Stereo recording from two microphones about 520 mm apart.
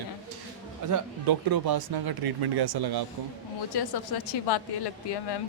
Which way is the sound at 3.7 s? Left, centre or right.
Left.